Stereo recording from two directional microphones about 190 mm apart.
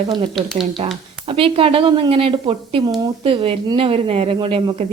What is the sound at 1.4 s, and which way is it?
A woman's voice, 30° right (ahead or behind).